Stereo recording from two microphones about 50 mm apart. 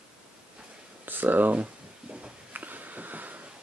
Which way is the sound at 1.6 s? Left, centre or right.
Right.